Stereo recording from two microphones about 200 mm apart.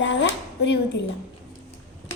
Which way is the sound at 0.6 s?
60° left (ahead or behind).